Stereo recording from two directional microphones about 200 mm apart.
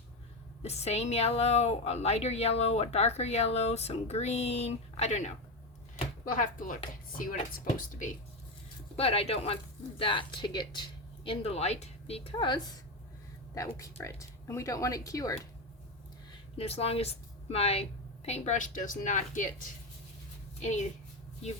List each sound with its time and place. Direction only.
0.6 s a woman's voice: 30° left (ahead or behind)
9.0 s a woman's voice: 30° left (ahead or behind)
16.6 s a woman's voice: 30° left (ahead or behind)